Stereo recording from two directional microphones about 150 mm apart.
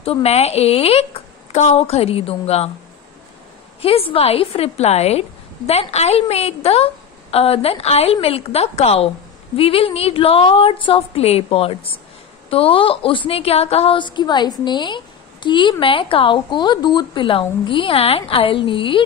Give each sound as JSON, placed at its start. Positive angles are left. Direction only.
{"t": 0.0, "sound": "a woman's voice", "side_deg": 40}
{"t": 3.8, "sound": "a woman's voice", "side_deg": 40}